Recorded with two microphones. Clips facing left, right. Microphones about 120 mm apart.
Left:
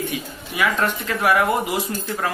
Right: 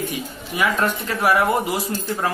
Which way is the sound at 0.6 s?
15° right (ahead or behind).